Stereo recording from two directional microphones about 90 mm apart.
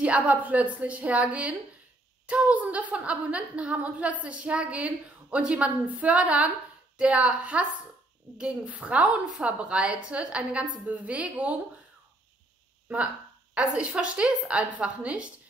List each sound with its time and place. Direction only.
0.0 s a woman's voice: 15° right (ahead or behind)
13.6 s a woman's voice: 15° right (ahead or behind)